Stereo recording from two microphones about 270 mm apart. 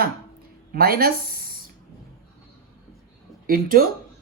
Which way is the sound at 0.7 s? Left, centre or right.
Right.